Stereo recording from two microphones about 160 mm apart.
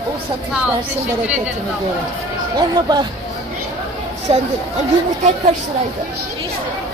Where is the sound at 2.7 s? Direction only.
25° right (ahead or behind).